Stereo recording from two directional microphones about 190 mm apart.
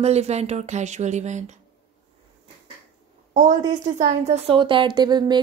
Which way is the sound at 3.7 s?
40° right (ahead or behind).